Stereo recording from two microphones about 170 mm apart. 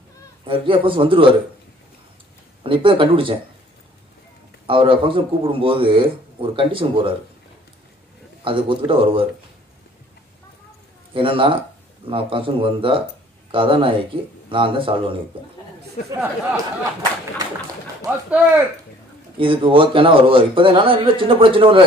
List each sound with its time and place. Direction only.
0.5 s speech: 30° right (ahead or behind)
2.6 s speech: 30° right (ahead or behind)
4.6 s speech: 30° right (ahead or behind)
8.5 s speech: 30° right (ahead or behind)
11.1 s speech: 30° right (ahead or behind)
16.0 s speech: 50° left (ahead or behind)
18.0 s speech: 15° right (ahead or behind)
19.3 s speech: 30° right (ahead or behind)